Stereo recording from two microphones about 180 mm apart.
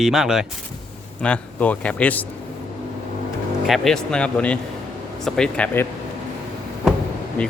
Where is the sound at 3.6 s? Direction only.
Centre (ahead or behind).